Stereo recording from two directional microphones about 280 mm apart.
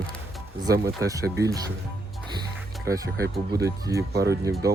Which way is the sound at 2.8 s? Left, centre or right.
Centre.